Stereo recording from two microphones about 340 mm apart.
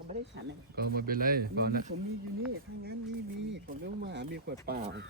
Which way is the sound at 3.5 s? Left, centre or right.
Right.